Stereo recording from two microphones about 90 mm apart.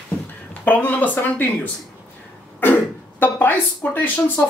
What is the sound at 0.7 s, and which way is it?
Speech, 20° left (ahead or behind).